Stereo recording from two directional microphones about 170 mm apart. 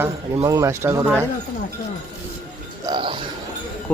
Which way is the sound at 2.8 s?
30° right (ahead or behind).